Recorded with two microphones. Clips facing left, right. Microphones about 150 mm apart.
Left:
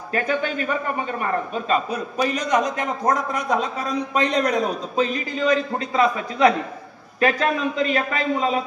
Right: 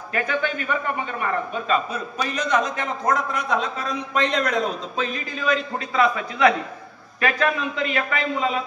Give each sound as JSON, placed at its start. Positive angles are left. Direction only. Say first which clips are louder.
{"t": 0.1, "sound": "a man's voice", "louder": "left 2 dB", "side_deg": 35}
{"t": 2.4, "sound": "a man's voice", "louder": "even", "side_deg": 15}
{"t": 2.8, "sound": "a man's voice", "louder": "left 1 dB", "side_deg": 40}